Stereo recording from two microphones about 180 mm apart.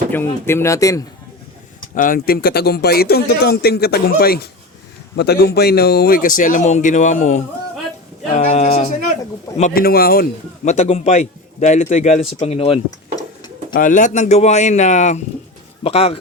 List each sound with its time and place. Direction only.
0.1 s speech: 15° left (ahead or behind)
2.0 s a man's voice: 50° left (ahead or behind)
10.7 s a man's voice: 35° left (ahead or behind)
13.1 s tick-tock: 25° left (ahead or behind)
13.7 s a man's voice: 45° left (ahead or behind)